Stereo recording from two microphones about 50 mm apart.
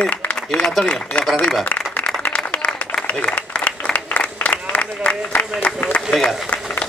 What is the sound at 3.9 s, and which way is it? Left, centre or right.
Applause, left.